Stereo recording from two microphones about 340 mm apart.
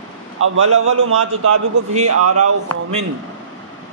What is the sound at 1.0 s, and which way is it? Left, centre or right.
A man's voice, right.